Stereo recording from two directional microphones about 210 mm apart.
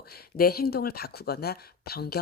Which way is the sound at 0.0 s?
45° left (ahead or behind).